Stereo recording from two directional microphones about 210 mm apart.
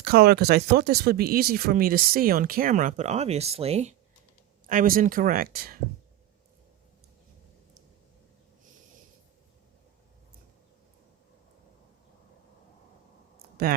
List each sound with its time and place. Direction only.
0.0 s speech: 45° right (ahead or behind)
13.6 s speech: 45° right (ahead or behind)